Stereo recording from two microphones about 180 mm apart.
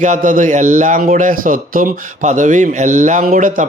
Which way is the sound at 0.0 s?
45° right (ahead or behind).